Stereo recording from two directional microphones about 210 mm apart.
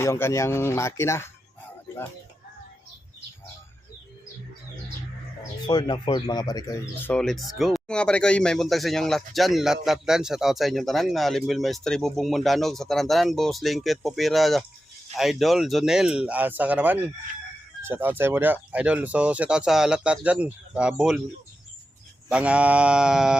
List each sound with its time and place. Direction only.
0.0 s speech: 10° left (ahead or behind)
5.6 s speech: 20° left (ahead or behind)
7.1 s speech: 5° left (ahead or behind)
22.3 s speech: 5° right (ahead or behind)